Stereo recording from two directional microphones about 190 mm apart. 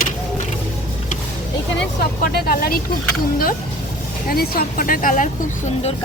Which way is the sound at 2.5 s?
50° left (ahead or behind).